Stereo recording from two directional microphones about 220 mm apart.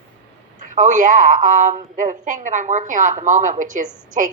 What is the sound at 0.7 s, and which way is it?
A woman's voice, 35° right (ahead or behind).